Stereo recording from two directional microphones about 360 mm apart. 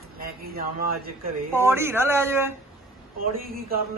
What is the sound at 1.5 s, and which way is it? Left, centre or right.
Speech, centre.